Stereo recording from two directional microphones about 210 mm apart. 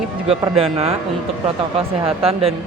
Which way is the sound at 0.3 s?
25° right (ahead or behind).